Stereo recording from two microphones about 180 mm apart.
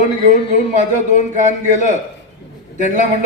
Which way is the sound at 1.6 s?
45° right (ahead or behind).